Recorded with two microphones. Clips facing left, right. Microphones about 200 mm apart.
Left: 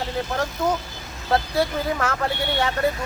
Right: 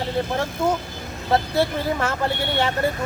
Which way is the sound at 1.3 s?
25° right (ahead or behind).